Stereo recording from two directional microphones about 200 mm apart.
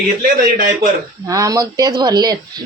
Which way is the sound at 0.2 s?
50° right (ahead or behind).